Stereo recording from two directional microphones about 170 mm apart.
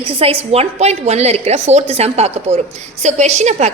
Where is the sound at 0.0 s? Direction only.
30° right (ahead or behind).